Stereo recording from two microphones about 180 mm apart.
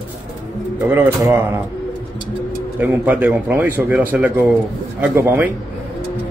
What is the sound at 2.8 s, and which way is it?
Speech, 10° right (ahead or behind).